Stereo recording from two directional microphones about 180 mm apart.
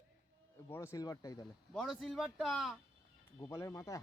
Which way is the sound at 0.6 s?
15° left (ahead or behind).